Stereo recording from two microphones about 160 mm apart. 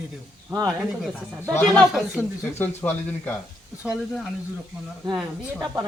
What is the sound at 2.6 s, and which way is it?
Speech, 15° left (ahead or behind).